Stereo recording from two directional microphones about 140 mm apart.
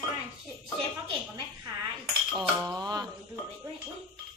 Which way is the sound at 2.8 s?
30° right (ahead or behind).